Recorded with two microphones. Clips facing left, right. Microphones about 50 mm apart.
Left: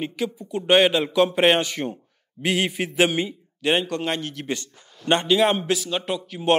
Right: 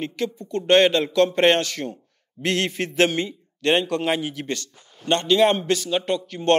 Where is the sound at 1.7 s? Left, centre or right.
Centre.